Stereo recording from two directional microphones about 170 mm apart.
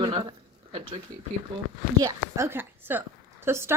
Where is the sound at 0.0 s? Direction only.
30° right (ahead or behind).